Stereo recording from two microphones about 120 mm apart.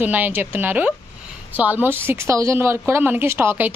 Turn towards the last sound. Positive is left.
turn(degrees=-15)  # may be behind; listen again after turning